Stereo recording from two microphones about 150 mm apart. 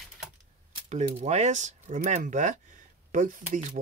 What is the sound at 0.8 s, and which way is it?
Speech, 50° right (ahead or behind).